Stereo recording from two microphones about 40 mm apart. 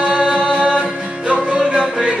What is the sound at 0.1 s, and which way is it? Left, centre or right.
Music, right.